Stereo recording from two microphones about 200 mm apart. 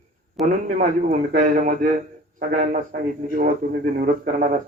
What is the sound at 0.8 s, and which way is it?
A man's voice, 45° right (ahead or behind).